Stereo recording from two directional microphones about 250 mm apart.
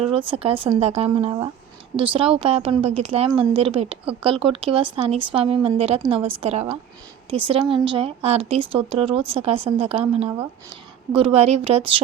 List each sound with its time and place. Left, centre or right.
0.3 s speech: right